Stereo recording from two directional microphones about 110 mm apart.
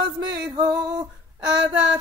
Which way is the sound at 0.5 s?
35° right (ahead or behind).